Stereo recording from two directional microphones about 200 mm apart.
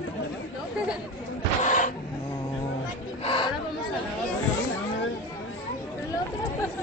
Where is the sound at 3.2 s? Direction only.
25° left (ahead or behind).